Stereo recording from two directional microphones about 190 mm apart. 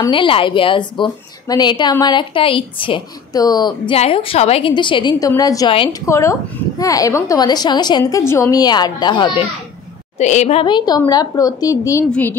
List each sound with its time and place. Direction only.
0.0 s a woman's voice: 25° left (ahead or behind)
10.1 s a woman's voice: 35° left (ahead or behind); by 12.4 s 10° left (ahead or behind)